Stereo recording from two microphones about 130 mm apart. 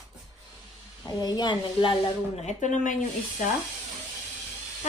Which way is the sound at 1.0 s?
30° left (ahead or behind).